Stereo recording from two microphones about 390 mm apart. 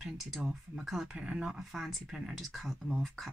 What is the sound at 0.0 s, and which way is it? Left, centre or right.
Speech, centre.